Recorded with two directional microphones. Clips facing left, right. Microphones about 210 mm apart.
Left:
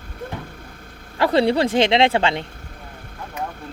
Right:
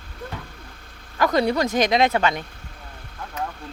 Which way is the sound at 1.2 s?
30° left (ahead or behind).